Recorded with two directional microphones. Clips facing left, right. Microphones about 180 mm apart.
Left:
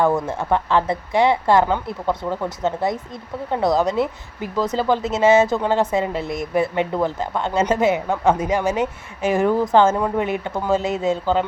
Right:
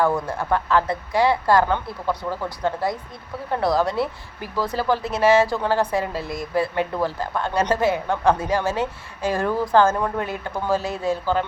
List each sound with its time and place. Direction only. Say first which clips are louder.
0.0 s a woman's voice: left 2 dB; 25° left (ahead or behind)